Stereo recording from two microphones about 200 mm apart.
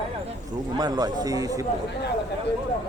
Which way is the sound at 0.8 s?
20° right (ahead or behind).